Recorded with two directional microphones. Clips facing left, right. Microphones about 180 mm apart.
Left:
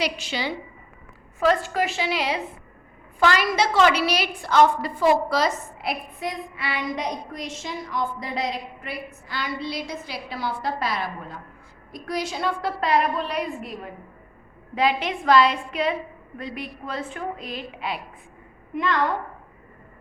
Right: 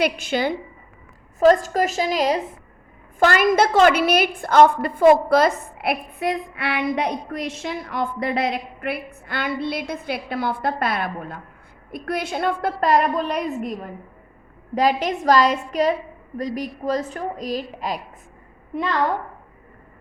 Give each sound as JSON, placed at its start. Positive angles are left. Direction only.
{"t": 0.0, "sound": "a woman's voice", "side_deg": -50}
{"t": 14.8, "sound": "a woman's voice", "side_deg": -40}